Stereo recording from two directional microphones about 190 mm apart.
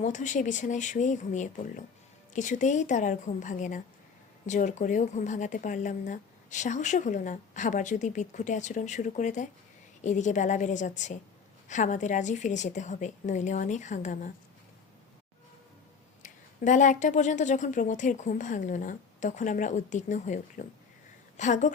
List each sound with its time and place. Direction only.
0.0 s speech: 40° left (ahead or behind)
16.2 s a woman's voice: 40° left (ahead or behind)